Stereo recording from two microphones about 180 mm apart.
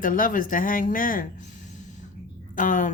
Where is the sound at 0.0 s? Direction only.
50° left (ahead or behind).